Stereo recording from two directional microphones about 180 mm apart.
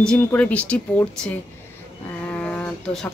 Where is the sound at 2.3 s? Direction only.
10° left (ahead or behind).